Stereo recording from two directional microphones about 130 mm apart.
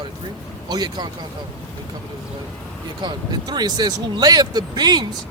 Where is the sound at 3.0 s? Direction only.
35° right (ahead or behind).